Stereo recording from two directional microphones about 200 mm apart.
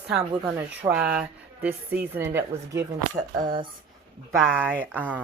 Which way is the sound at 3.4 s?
45° right (ahead or behind).